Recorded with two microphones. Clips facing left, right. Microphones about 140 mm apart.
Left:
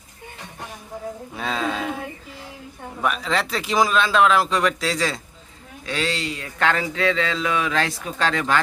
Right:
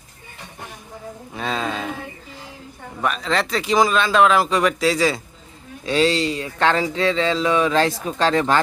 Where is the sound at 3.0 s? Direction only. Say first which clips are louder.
Right 1 dB; 5° left (ahead or behind).